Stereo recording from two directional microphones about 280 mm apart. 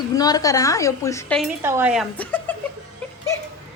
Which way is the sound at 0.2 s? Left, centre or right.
Centre.